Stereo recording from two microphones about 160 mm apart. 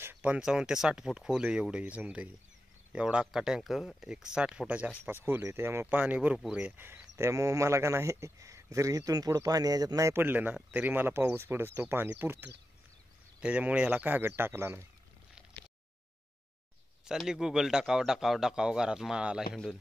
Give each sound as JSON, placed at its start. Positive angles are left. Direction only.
{"t": 0.0, "sound": "a man's voice", "side_deg": -10}
{"t": 17.0, "sound": "a man's voice", "side_deg": -5}